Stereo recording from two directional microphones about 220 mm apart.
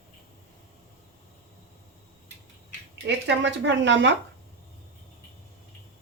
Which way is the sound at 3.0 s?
55° right (ahead or behind).